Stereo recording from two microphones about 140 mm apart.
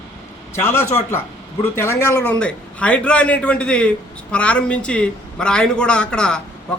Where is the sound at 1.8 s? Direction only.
20° left (ahead or behind).